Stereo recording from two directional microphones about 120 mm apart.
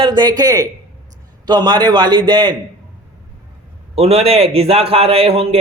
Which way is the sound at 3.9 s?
55° right (ahead or behind).